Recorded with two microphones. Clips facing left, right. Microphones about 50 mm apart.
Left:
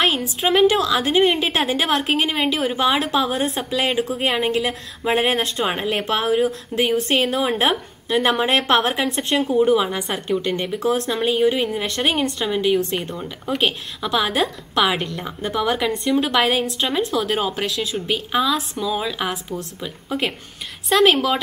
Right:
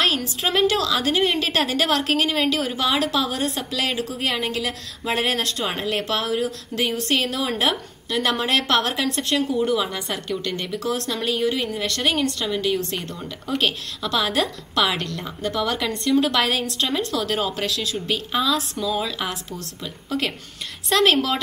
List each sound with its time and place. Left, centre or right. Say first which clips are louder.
0.0 s a woman's voice: left 2 dB; centre